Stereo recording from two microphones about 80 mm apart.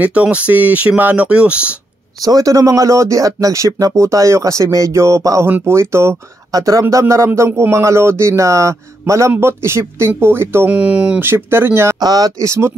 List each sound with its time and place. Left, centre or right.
0.0 s speech: centre
2.2 s speech: right
10.7 s speech: centre
11.1 s speech: right
12.0 s speech: right